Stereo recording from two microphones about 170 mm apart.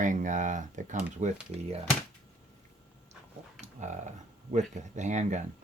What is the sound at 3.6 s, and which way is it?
Speech, 45° right (ahead or behind).